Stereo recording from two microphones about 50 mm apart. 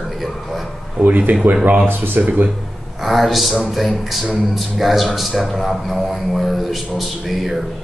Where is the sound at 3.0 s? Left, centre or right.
Centre.